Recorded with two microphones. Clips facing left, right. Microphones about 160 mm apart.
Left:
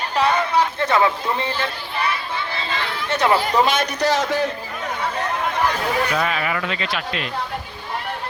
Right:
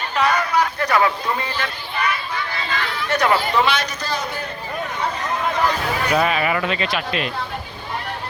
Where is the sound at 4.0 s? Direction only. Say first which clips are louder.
Left 7 dB; 90° left.